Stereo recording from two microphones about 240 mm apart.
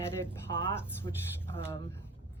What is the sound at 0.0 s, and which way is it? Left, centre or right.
Speech, centre.